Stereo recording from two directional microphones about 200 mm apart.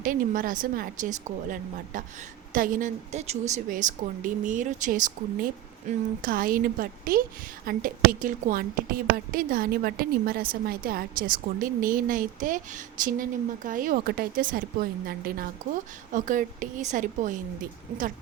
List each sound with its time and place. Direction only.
0.0 s a woman's voice: 45° right (ahead or behind)